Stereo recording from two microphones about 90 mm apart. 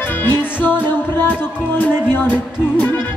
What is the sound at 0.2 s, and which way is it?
Music, 20° left (ahead or behind).